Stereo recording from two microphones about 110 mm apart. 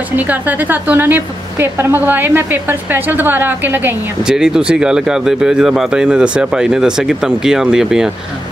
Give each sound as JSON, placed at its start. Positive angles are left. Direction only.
{"t": 0.1, "sound": "a woman's voice", "side_deg": -15}
{"t": 4.2, "sound": "speech", "side_deg": -5}